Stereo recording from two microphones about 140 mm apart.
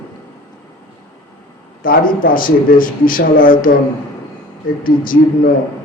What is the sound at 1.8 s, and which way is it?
Speech, 90° left.